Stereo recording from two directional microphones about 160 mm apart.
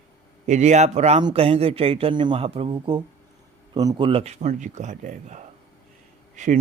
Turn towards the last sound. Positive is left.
turn(degrees=-50)  # may be behind; listen again after turning